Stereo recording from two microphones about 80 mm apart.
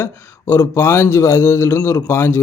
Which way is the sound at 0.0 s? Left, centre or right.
Left.